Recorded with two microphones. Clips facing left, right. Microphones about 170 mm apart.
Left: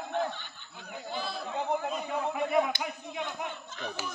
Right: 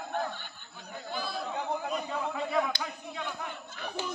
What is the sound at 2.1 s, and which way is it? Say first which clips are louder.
Speech: left 4 dB; 15° left (ahead or behind).